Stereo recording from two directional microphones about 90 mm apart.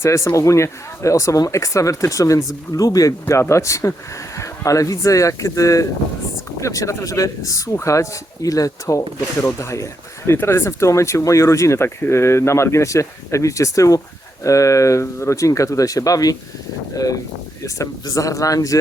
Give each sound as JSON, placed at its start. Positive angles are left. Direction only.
{"t": 0.0, "sound": "speech", "side_deg": 30}